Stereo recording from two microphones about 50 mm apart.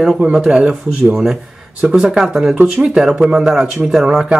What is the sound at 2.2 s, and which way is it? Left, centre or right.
Speech, centre.